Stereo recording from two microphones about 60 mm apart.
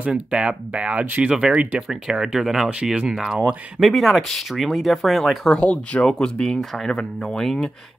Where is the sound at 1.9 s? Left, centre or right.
Centre.